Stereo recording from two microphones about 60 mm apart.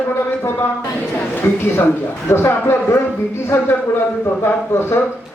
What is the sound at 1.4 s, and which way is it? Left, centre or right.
A man's voice, left.